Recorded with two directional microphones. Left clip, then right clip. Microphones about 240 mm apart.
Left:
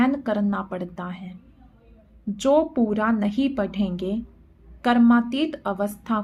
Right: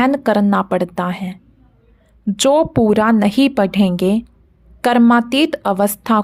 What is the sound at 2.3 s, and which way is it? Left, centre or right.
A woman's voice, right.